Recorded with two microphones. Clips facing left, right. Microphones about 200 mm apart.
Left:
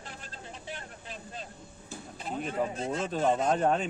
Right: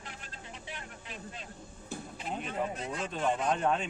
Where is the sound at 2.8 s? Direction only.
45° left (ahead or behind).